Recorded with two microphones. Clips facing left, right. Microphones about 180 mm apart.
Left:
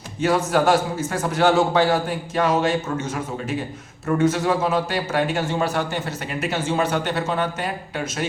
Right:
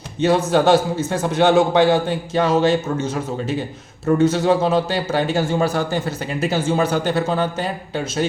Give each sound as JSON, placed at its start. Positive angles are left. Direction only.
{"t": 0.2, "sound": "a man's voice", "side_deg": -25}
{"t": 4.0, "sound": "a man's voice", "side_deg": -30}